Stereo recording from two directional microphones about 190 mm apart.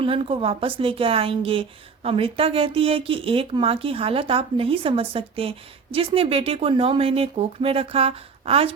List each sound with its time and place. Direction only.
0.0 s speech: 30° right (ahead or behind)